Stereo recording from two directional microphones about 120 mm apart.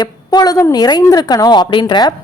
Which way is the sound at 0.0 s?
35° left (ahead or behind).